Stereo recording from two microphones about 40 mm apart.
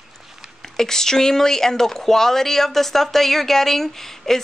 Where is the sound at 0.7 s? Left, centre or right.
Centre.